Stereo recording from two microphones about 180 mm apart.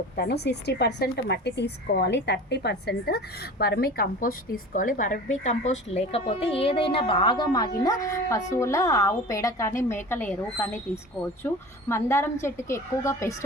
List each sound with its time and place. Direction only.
0.2 s a woman's voice: 65° left (ahead or behind); by 13.3 s 15° left (ahead or behind)